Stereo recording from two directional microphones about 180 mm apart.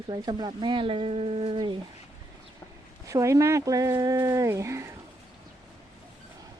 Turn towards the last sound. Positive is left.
turn(degrees=-15)  # may be behind; listen again after turning